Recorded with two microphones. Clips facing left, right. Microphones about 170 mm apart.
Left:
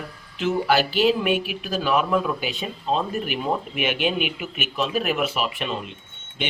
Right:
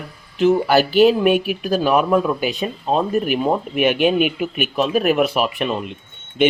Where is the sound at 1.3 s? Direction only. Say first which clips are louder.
Right 6 dB; 45° right (ahead or behind).